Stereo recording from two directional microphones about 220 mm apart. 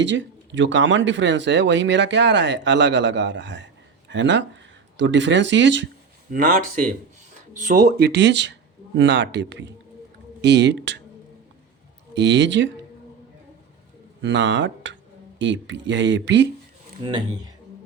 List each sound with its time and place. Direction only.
0.0 s speech: 55° right (ahead or behind)
6.3 s speech: 40° right (ahead or behind)
12.1 s speech: 55° right (ahead or behind)
14.2 s speech: 55° right (ahead or behind)
17.0 s speech: 20° right (ahead or behind)